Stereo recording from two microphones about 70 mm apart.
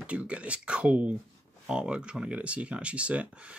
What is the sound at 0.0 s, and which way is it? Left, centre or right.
Speech, centre.